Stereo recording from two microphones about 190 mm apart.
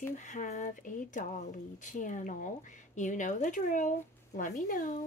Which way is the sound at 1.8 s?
40° left (ahead or behind).